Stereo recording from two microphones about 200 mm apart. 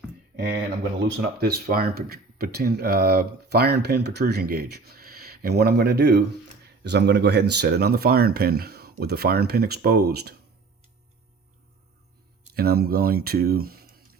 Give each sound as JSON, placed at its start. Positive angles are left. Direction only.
{"t": 1.0, "sound": "speech", "side_deg": -55}
{"t": 12.5, "sound": "speech", "side_deg": -50}